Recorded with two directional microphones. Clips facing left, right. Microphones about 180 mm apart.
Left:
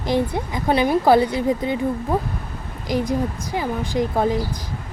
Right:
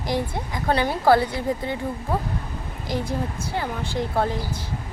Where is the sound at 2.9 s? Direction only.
15° left (ahead or behind).